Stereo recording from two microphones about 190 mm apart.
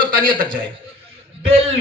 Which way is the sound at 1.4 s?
30° right (ahead or behind).